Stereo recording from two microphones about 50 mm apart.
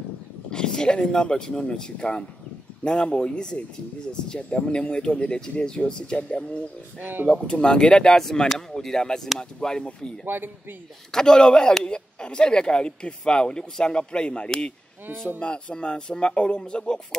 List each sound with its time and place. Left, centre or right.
0.5 s speech: centre
7.0 s speech: right
7.2 s speech: centre
10.2 s a man's voice: right
11.1 s speech: centre